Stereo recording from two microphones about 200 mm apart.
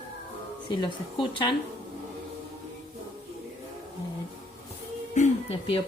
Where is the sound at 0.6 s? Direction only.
20° left (ahead or behind).